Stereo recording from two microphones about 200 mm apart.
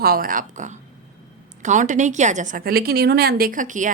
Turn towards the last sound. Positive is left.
turn(degrees=-40)  # may be behind; listen again after turning